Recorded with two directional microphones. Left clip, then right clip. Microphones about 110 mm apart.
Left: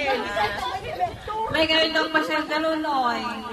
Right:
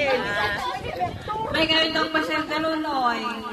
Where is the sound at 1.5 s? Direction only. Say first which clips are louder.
Even; 5° right (ahead or behind).